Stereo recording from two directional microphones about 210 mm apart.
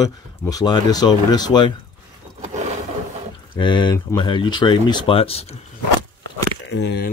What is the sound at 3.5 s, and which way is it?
Speech, 20° left (ahead or behind).